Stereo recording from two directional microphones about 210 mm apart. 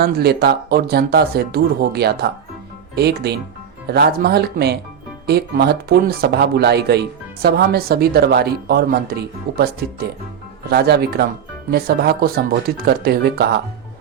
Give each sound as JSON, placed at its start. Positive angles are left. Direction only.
{"t": 0.0, "sound": "a woman's voice", "side_deg": -50}